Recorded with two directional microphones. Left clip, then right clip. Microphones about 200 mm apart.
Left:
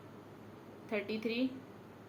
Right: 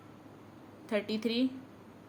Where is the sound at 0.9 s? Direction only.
40° right (ahead or behind).